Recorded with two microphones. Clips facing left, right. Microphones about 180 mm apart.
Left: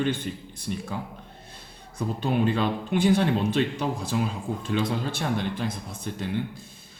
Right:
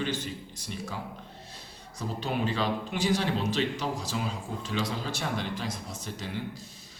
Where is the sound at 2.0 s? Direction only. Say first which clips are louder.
Left 6 dB; 55° left (ahead or behind).